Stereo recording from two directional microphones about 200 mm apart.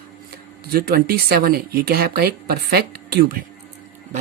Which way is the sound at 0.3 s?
50° right (ahead or behind).